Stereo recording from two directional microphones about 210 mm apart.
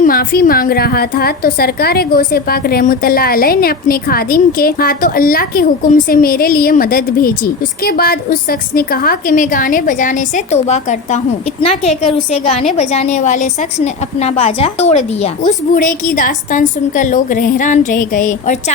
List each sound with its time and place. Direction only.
0.0 s a woman's voice: 45° left (ahead or behind)